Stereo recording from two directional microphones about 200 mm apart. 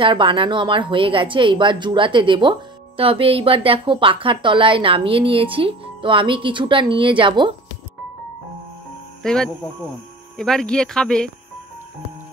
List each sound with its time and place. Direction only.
0.0 s speech: 25° right (ahead or behind)
9.2 s speech: 5° left (ahead or behind)